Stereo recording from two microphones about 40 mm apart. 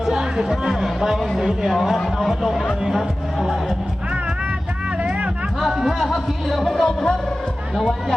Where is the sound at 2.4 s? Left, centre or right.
Centre.